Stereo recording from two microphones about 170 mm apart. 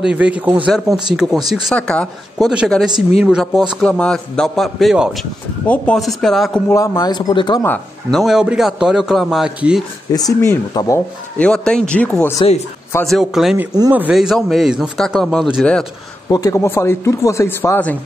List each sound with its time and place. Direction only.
0.0 s a man's voice: 5° right (ahead or behind)
6.7 s a man's voice: 20° left (ahead or behind)
7.6 s speech: 10° left (ahead or behind)
8.2 s a man's voice: 5° right (ahead or behind)
10.1 s a man's voice: 20° left (ahead or behind)
11.3 s speech: 5° left (ahead or behind)
13.0 s a man's voice: centre (ahead or behind)
16.3 s speech: 20° left (ahead or behind)